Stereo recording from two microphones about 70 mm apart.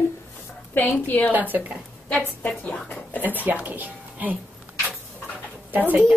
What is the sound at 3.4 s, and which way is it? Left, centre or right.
Speech, right.